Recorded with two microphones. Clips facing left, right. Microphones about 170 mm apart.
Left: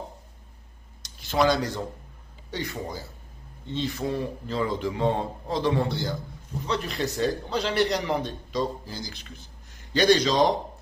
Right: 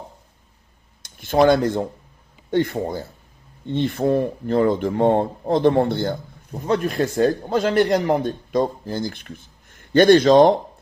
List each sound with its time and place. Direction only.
1.0 s speech: 50° right (ahead or behind)